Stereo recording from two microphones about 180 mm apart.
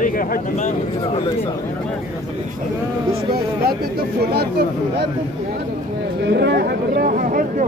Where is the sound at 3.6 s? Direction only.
60° right (ahead or behind).